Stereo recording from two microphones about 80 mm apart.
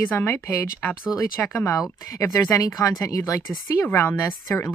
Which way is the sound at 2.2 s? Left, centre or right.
Left.